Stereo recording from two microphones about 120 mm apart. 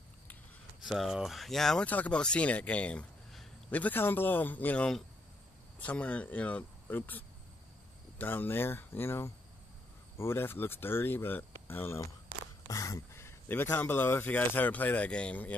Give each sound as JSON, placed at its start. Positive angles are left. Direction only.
{"t": 0.8, "sound": "speech", "side_deg": 0}